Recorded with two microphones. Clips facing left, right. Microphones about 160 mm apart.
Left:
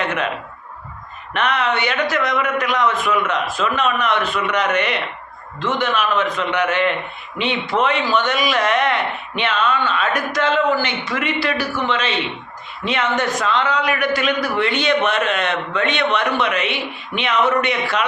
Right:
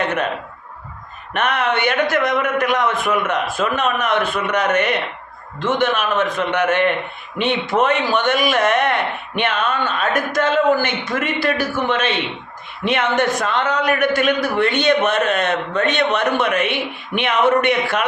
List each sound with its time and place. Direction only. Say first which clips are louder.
1.3 s speech: even; 50° right (ahead or behind)